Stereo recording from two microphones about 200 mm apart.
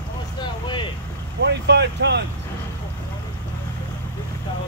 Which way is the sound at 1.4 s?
60° right (ahead or behind).